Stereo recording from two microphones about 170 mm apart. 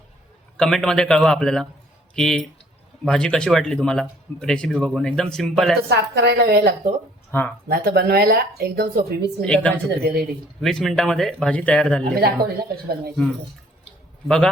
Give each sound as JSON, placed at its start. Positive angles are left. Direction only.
{"t": 0.5, "sound": "speech", "side_deg": 5}
{"t": 5.9, "sound": "a woman's voice", "side_deg": -70}
{"t": 7.3, "sound": "speech", "side_deg": 10}
{"t": 7.7, "sound": "speech", "side_deg": -65}
{"t": 9.4, "sound": "a woman's voice", "side_deg": 5}
{"t": 10.0, "sound": "a woman's voice", "side_deg": -65}
{"t": 10.6, "sound": "speech", "side_deg": 0}
{"t": 12.1, "sound": "speech", "side_deg": -65}
{"t": 14.3, "sound": "speech", "side_deg": 5}